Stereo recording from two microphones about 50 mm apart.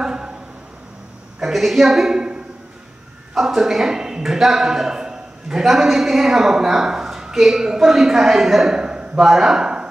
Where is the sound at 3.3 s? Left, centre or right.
Centre.